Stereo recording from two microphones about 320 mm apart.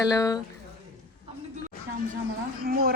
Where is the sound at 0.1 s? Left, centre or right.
Centre.